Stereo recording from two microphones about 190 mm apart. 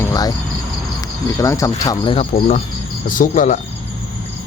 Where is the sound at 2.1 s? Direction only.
35° left (ahead or behind).